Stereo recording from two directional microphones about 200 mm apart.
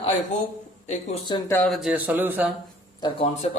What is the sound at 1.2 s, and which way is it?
Speech, 15° left (ahead or behind).